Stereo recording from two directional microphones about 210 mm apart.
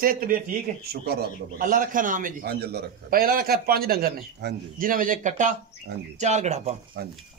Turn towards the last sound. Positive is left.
turn(degrees=-45)  # may be behind; listen again after turning